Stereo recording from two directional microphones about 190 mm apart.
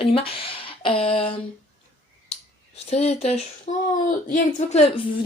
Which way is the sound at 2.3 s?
35° left (ahead or behind).